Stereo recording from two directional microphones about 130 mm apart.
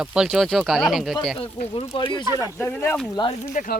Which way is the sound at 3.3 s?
70° left (ahead or behind).